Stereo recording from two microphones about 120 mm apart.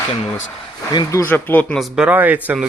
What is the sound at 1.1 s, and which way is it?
Speech, 20° left (ahead or behind).